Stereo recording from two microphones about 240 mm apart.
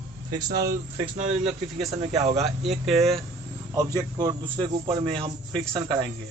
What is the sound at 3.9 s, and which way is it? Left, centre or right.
Speech, centre.